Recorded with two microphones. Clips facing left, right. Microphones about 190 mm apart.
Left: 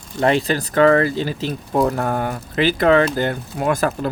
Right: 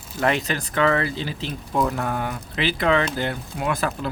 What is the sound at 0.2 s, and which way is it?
Speech, 30° left (ahead or behind).